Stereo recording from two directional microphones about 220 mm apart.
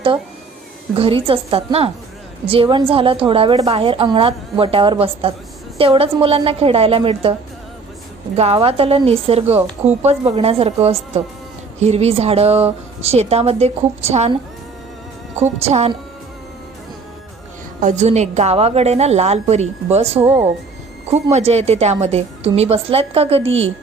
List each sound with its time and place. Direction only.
0.9 s a woman's voice: 25° right (ahead or behind)
8.4 s a woman's voice: 25° right (ahead or behind)
15.6 s a woman's voice: 30° right (ahead or behind)
17.7 s a woman's voice: 35° right (ahead or behind)
23.5 s a woman's voice: 60° right (ahead or behind)